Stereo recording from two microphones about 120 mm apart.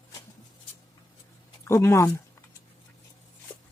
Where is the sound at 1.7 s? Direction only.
25° left (ahead or behind).